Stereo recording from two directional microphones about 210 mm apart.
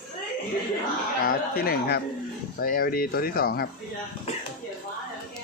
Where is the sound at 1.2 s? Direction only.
45° left (ahead or behind).